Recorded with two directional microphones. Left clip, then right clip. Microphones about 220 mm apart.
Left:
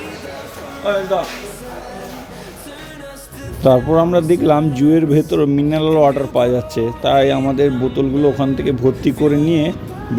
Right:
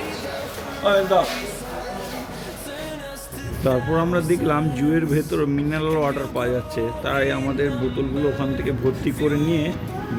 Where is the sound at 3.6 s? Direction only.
20° left (ahead or behind).